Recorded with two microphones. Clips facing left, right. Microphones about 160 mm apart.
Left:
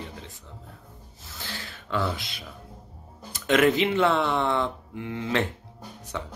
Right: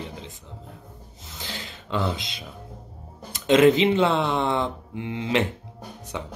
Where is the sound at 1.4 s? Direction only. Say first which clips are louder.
Right 2 dB; 20° right (ahead or behind).